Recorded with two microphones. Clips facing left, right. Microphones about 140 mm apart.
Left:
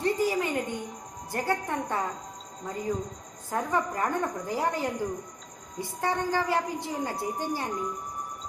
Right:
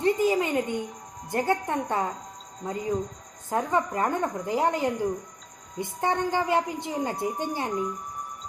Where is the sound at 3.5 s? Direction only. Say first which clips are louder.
Right 3 dB; 20° right (ahead or behind).